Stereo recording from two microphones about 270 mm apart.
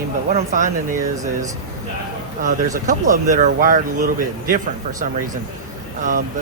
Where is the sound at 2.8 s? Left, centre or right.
Right.